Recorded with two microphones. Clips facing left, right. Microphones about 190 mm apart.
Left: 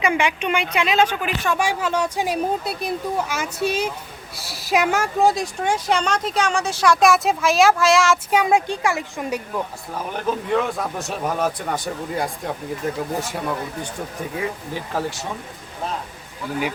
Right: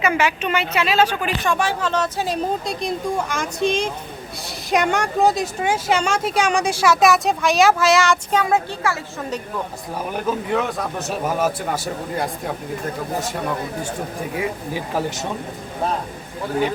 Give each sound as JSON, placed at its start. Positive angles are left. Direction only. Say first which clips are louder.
{"t": 0.0, "sound": "speech", "louder": "right 1 dB", "side_deg": 15}
{"t": 8.4, "sound": "speech", "louder": "left 1 dB", "side_deg": 15}
{"t": 10.1, "sound": "speech", "louder": "even", "side_deg": -5}
{"t": 14.3, "sound": "speech", "louder": "right 2 dB", "side_deg": -10}